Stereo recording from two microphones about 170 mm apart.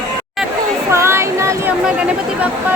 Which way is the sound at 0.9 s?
15° right (ahead or behind).